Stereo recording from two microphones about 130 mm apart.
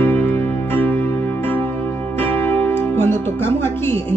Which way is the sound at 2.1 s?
15° left (ahead or behind).